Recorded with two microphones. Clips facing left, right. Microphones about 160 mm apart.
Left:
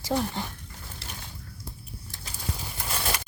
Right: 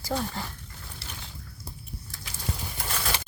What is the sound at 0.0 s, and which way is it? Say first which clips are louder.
Speech: left 3 dB; 15° left (ahead or behind).